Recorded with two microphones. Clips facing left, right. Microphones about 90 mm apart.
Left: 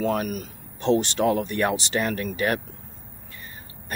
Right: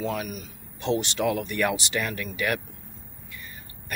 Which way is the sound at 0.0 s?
45° left (ahead or behind).